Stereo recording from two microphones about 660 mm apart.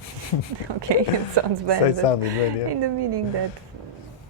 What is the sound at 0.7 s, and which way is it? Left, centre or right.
Speech, right.